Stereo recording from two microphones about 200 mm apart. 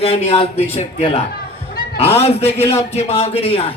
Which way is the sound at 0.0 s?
30° left (ahead or behind).